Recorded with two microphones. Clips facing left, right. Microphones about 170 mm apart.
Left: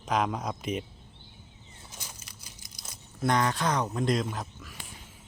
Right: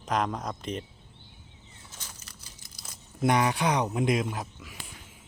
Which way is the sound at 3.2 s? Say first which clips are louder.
Right 2 dB; 15° right (ahead or behind).